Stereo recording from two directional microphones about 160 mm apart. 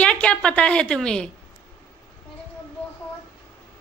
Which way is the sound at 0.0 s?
5° left (ahead or behind).